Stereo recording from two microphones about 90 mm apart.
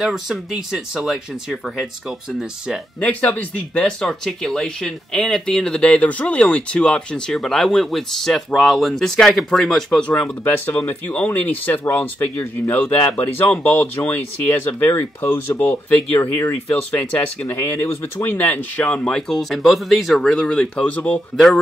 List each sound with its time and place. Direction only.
0.0 s speech: 5° right (ahead or behind)
3.0 s speech: 15° left (ahead or behind)
10.4 s speech: 25° left (ahead or behind)